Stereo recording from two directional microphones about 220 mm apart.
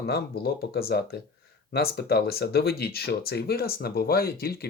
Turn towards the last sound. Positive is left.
turn(degrees=45)  # may be behind; listen again after turning